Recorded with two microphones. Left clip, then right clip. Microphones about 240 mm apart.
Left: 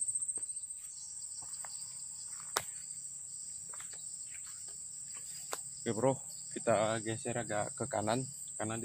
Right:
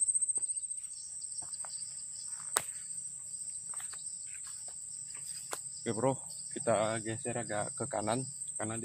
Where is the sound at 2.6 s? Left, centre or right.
Right.